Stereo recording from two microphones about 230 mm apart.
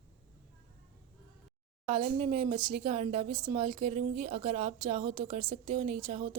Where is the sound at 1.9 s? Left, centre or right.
Right.